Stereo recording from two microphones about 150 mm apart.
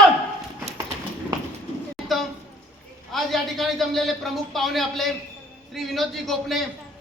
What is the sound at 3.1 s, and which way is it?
A man's voice, centre (ahead or behind).